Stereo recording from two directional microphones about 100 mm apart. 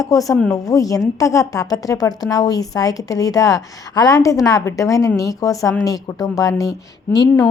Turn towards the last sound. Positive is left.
turn(degrees=40)  # may be behind; listen again after turning